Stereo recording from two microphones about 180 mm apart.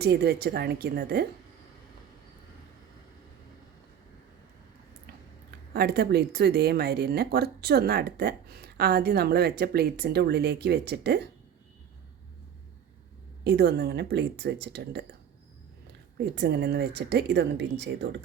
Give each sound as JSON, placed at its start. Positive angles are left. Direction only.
{"t": 0.0, "sound": "speech", "side_deg": -65}
{"t": 5.7, "sound": "speech", "side_deg": -60}
{"t": 13.4, "sound": "speech", "side_deg": -65}
{"t": 16.1, "sound": "speech", "side_deg": -65}